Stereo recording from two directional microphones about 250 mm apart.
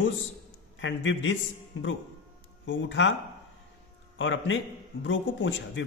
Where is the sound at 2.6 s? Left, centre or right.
Left.